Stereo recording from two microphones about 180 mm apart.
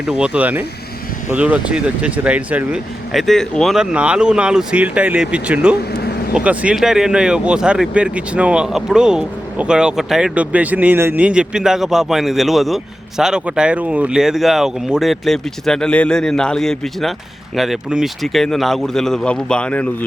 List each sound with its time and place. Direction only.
0.0 s speech: 5° right (ahead or behind)
5.9 s vehicle: 65° left (ahead or behind)
6.3 s speech: 5° right (ahead or behind)